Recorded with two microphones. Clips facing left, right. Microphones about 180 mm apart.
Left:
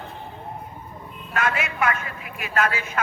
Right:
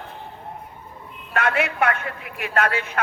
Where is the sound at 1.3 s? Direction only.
60° right (ahead or behind).